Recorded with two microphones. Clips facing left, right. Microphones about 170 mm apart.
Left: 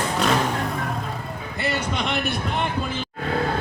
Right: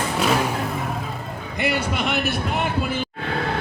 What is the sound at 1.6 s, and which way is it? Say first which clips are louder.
Speech: right 2 dB; 10° right (ahead or behind).